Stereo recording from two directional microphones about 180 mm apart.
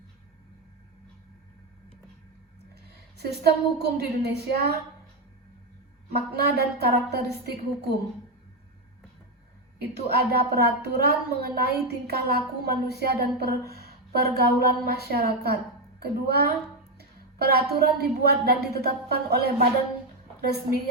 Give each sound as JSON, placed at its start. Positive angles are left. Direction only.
{"t": 2.8, "sound": "a woman's voice", "side_deg": -65}
{"t": 6.1, "sound": "a woman's voice", "side_deg": -60}
{"t": 9.7, "sound": "a woman's voice", "side_deg": -60}
{"t": 17.0, "sound": "music", "side_deg": -60}
{"t": 18.3, "sound": "a woman's voice", "side_deg": -60}